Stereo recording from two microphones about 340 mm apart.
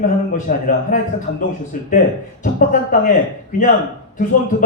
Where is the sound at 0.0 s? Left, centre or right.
Left.